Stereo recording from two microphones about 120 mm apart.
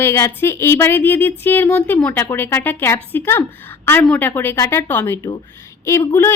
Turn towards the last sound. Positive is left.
turn(degrees=20)  # may be behind; listen again after turning